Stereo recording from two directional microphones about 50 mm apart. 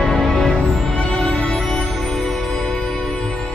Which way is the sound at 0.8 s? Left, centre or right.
Centre.